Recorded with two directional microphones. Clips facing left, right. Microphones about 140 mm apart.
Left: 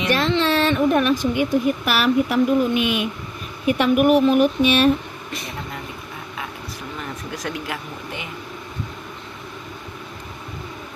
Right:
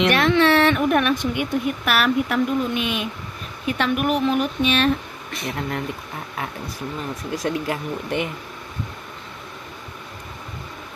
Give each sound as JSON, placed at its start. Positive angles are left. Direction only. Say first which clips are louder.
{"t": 0.0, "sound": "speech", "louder": "right 2 dB", "side_deg": -70}
{"t": 0.4, "sound": "a sound", "louder": "right 3 dB", "side_deg": -70}
{"t": 0.7, "sound": "speech", "louder": "left 2 dB", "side_deg": 25}
{"t": 1.2, "sound": "speech", "louder": "left 4 dB", "side_deg": 0}
{"t": 7.3, "sound": "speech", "louder": "right 5 dB", "side_deg": -35}